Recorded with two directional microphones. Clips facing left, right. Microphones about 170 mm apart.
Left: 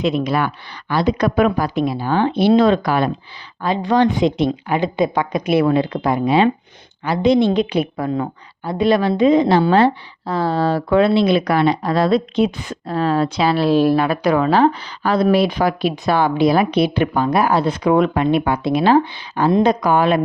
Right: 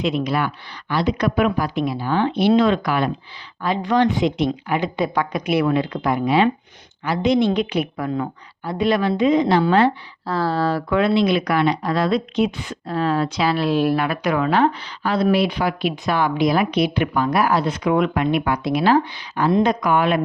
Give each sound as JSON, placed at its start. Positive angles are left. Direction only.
{"t": 0.0, "sound": "a woman's voice", "side_deg": 40}
{"t": 10.2, "sound": "speech", "side_deg": 20}